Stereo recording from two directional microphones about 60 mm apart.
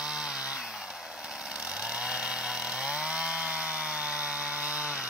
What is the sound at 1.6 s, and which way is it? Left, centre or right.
Chainsaw, centre.